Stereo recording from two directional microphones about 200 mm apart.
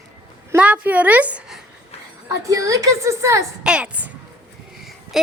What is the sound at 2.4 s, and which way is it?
A woman's voice, 15° right (ahead or behind).